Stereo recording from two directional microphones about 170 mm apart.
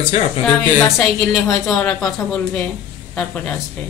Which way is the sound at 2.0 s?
5° left (ahead or behind).